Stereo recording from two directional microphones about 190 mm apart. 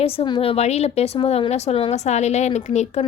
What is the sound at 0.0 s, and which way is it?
A woman's voice, 30° left (ahead or behind).